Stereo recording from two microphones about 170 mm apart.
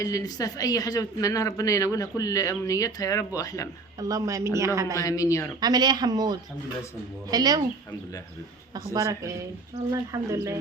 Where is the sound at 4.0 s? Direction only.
20° right (ahead or behind).